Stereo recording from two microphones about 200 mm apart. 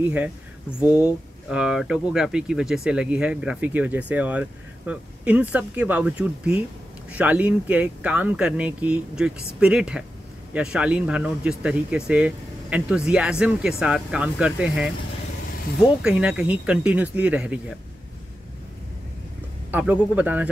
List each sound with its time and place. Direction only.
0.0 s speech: 10° right (ahead or behind)
19.7 s speech: 5° right (ahead or behind)